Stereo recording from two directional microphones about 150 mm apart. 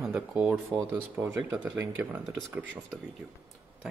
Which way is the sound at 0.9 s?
15° right (ahead or behind).